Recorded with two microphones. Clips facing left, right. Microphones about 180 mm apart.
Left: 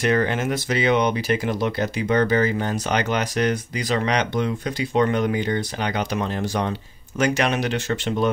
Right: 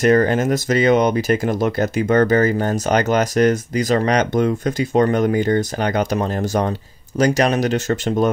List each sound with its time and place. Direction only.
0.0 s speech: 45° right (ahead or behind)